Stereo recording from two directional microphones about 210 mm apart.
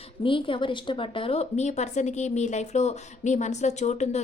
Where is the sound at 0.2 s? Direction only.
25° left (ahead or behind).